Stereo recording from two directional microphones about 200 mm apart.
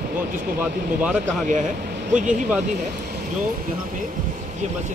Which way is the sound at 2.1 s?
40° right (ahead or behind).